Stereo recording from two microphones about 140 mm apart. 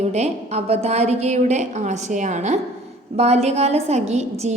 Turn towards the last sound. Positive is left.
turn(degrees=-55)  # may be behind; listen again after turning